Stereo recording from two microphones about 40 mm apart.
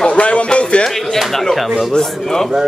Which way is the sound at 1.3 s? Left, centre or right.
Centre.